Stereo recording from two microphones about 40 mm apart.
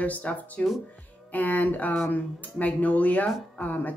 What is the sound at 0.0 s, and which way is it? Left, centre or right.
Speech, left.